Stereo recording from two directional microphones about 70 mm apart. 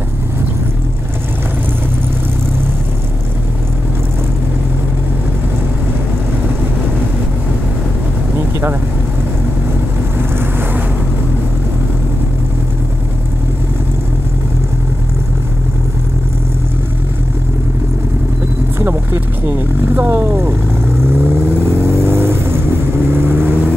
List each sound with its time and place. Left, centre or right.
18.8 s vehicle: right